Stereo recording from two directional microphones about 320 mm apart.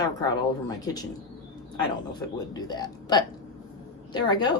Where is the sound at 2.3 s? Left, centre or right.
Centre.